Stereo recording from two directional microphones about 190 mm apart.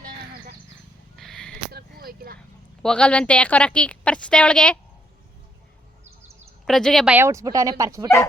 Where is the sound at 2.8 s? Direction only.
5° left (ahead or behind).